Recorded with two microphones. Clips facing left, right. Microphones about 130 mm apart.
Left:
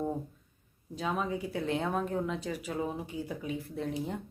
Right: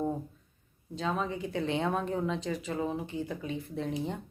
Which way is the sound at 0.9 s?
5° left (ahead or behind).